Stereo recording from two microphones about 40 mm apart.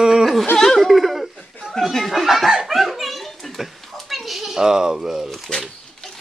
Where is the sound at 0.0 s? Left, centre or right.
Centre.